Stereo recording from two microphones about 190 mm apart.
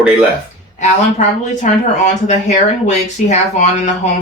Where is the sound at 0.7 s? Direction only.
40° left (ahead or behind).